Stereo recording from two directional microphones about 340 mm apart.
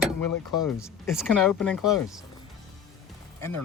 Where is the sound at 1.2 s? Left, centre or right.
Centre.